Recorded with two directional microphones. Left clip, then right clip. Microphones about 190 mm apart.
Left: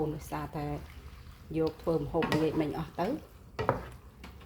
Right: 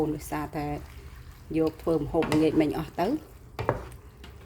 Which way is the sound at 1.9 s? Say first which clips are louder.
Right 4 dB; 45° right (ahead or behind).